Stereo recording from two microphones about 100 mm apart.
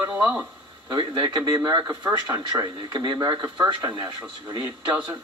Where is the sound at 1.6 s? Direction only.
40° right (ahead or behind).